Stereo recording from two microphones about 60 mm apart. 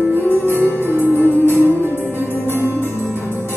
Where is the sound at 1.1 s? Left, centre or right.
Left.